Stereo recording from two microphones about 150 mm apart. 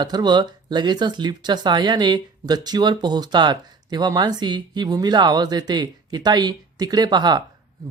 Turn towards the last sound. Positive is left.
turn(degrees=-30)  # may be behind; listen again after turning